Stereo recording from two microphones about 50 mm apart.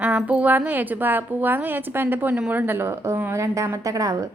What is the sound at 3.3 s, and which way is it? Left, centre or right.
Speech, right.